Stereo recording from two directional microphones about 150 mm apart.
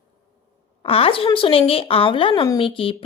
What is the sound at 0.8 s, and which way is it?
A woman's voice, 40° left (ahead or behind).